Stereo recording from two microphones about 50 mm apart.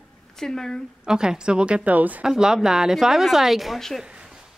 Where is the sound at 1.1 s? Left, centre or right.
Centre.